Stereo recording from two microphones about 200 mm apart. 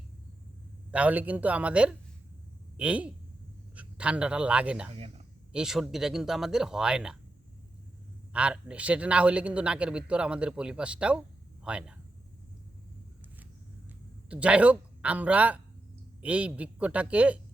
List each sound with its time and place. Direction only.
0.9 s a man's voice: 5° right (ahead or behind)
4.9 s speech: 30° right (ahead or behind)
5.5 s a man's voice: 5° right (ahead or behind)
8.3 s a man's voice: 5° right (ahead or behind)
14.3 s speech: 5° right (ahead or behind)